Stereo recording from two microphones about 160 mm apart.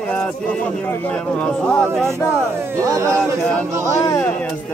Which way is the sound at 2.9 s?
20° right (ahead or behind).